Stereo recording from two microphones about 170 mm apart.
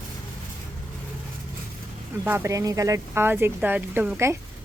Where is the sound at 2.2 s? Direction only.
10° right (ahead or behind).